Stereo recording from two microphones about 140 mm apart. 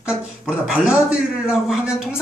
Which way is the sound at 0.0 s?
5° right (ahead or behind).